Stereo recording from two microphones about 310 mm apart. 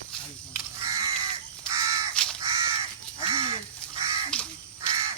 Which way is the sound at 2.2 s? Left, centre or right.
Centre.